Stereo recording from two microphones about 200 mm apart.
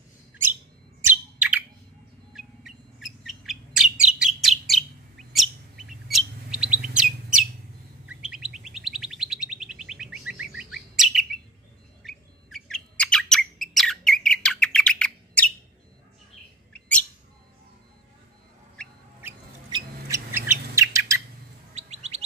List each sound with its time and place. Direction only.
0.3 s bird: 10° right (ahead or behind)
5.3 s chirp: centre (ahead or behind)
12.0 s bird: centre (ahead or behind)
18.8 s a sound: 5° left (ahead or behind)
19.7 s bird: 15° right (ahead or behind)
21.7 s bird: 35° right (ahead or behind)